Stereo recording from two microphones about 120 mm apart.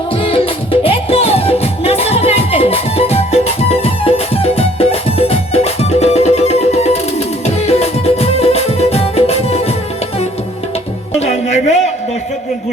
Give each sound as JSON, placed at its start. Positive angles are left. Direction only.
{"t": 0.2, "sound": "music", "side_deg": 50}
{"t": 11.2, "sound": "music", "side_deg": 70}